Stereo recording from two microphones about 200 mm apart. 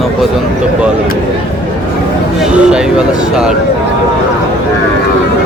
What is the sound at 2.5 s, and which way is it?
Speech, 5° right (ahead or behind).